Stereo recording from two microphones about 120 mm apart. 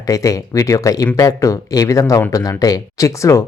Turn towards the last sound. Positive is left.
turn(degrees=25)  # may be behind; listen again after turning